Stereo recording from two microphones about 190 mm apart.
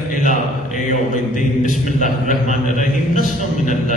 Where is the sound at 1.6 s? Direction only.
40° left (ahead or behind).